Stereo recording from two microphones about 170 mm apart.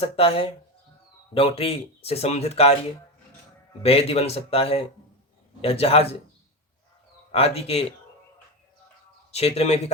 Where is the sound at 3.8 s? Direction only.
35° left (ahead or behind).